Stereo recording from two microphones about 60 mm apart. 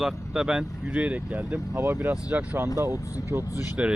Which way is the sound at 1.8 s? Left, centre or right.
Right.